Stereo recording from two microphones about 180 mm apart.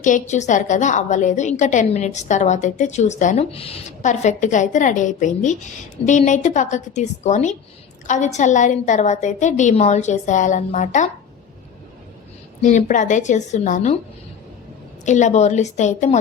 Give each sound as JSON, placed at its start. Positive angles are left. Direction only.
{"t": 0.0, "sound": "a woman's voice", "side_deg": 45}
{"t": 12.6, "sound": "a woman's voice", "side_deg": 45}
{"t": 15.0, "sound": "a woman's voice", "side_deg": 40}